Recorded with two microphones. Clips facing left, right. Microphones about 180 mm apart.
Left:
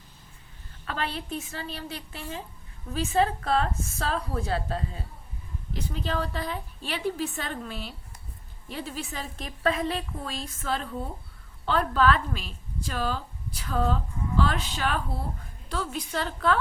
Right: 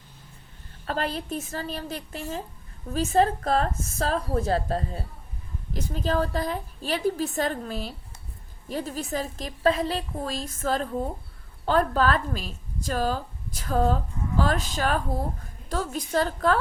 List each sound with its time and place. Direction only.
0.9 s a woman's voice: 40° right (ahead or behind)